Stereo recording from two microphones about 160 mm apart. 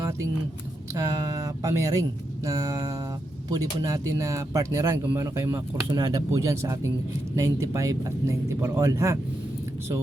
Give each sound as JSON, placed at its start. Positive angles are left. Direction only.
{"t": 0.9, "sound": "speech", "side_deg": -20}